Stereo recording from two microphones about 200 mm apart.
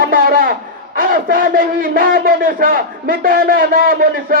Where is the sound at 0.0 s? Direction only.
45° right (ahead or behind).